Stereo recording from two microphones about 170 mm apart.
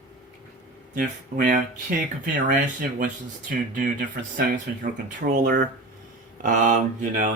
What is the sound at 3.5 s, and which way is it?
Speech, 55° right (ahead or behind).